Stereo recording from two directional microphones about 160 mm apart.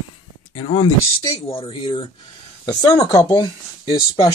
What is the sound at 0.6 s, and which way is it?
Speech, 40° left (ahead or behind).